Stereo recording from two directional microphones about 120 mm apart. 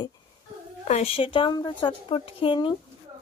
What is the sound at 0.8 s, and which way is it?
A woman's voice, 60° left (ahead or behind).